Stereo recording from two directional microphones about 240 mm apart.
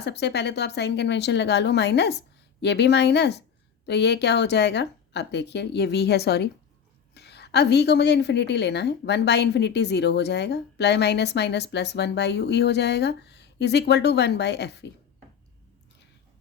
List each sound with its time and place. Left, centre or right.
0.0 s a woman's voice: left